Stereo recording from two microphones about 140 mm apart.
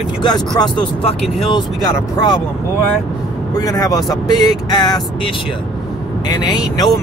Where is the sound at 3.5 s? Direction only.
25° left (ahead or behind).